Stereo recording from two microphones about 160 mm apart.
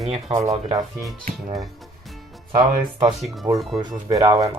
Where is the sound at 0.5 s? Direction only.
30° right (ahead or behind).